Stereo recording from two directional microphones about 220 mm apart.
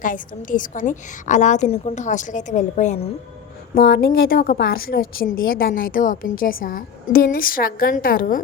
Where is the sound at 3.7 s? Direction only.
40° left (ahead or behind).